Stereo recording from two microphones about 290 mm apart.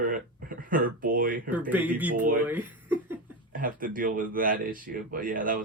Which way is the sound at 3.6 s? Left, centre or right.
Right.